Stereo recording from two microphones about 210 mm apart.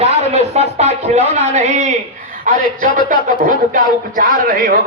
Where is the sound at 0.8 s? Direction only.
30° right (ahead or behind).